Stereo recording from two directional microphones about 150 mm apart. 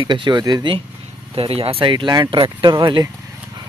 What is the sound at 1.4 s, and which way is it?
Speech, 40° right (ahead or behind).